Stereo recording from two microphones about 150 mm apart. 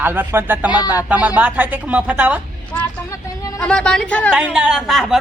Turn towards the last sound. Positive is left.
turn(degrees=0)  # may be behind; listen again after turning